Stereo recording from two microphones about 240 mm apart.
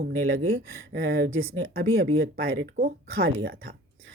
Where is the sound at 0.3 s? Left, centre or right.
Right.